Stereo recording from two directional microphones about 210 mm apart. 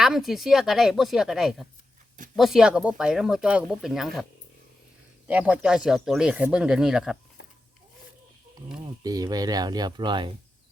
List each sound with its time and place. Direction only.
0.0 s speech: centre (ahead or behind)
5.3 s speech: 5° right (ahead or behind)
7.4 s a sound: 55° left (ahead or behind)
9.0 s speech: 20° right (ahead or behind)